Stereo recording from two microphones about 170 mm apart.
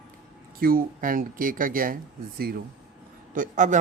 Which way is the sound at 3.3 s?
45° right (ahead or behind).